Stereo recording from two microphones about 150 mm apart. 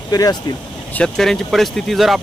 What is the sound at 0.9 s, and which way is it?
Speech, 5° left (ahead or behind).